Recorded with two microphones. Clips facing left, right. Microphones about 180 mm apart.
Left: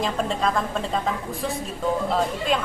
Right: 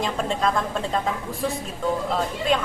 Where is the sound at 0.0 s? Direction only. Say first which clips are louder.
Even; centre (ahead or behind).